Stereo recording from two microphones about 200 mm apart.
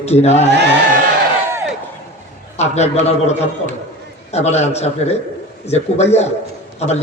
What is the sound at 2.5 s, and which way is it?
A man's voice, 35° left (ahead or behind).